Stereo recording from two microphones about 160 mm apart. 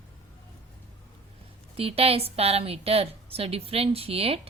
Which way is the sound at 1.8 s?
35° right (ahead or behind).